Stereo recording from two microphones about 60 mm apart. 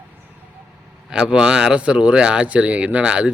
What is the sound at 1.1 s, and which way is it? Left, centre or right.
Speech, centre.